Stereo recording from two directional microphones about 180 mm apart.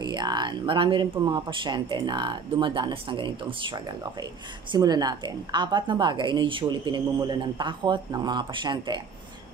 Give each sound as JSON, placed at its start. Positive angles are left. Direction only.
{"t": 0.0, "sound": "speech", "side_deg": -25}